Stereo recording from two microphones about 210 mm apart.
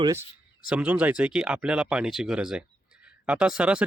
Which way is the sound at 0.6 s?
5° right (ahead or behind).